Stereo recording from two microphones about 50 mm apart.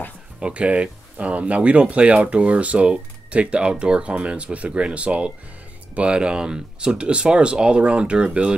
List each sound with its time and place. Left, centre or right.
0.4 s speech: right